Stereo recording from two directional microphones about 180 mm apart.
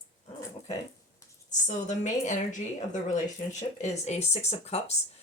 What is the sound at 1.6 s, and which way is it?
A woman's voice, 45° left (ahead or behind).